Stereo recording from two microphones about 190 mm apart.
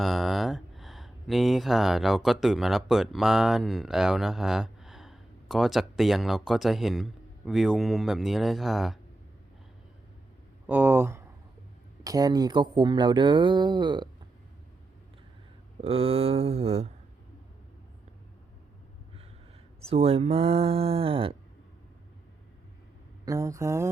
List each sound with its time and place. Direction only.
0.0 s speech: centre (ahead or behind)
10.7 s speech: 10° right (ahead or behind)
15.8 s speech: 30° right (ahead or behind)
19.8 s speech: 30° right (ahead or behind)
23.2 s speech: 15° right (ahead or behind)